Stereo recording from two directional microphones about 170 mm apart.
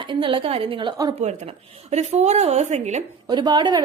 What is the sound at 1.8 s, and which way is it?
Speech, 40° right (ahead or behind).